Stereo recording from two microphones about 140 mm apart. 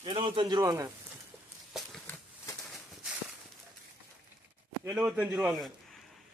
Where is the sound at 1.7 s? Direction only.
Centre (ahead or behind).